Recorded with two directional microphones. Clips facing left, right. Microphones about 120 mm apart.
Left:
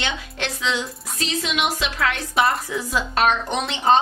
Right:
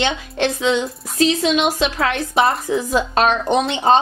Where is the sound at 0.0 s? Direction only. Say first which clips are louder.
Right 8 dB; 25° right (ahead or behind).